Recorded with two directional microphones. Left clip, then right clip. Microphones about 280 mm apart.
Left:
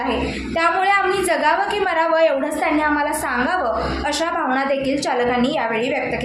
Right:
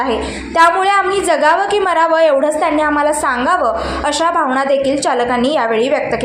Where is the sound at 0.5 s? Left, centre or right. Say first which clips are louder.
Right 6 dB; centre.